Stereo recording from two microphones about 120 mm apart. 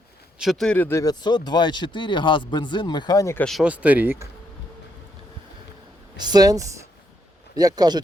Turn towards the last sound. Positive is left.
turn(degrees=-35)  # may be behind; listen again after turning